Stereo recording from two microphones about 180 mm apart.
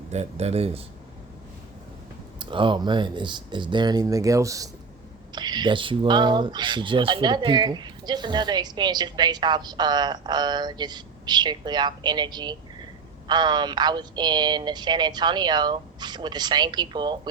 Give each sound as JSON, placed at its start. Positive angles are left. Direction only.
{"t": 0.1, "sound": "speech", "side_deg": -35}
{"t": 2.4, "sound": "speech", "side_deg": -25}